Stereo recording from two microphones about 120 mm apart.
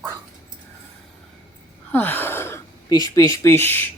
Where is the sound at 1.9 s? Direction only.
15° left (ahead or behind).